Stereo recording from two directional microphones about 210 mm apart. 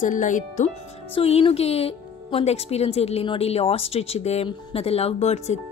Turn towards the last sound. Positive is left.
turn(degrees=30)  # may be behind; listen again after turning